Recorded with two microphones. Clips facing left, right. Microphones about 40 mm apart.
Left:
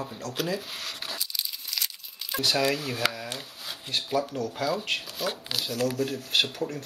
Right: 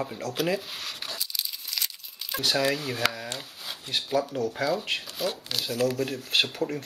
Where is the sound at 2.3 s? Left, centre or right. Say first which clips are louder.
Even; centre.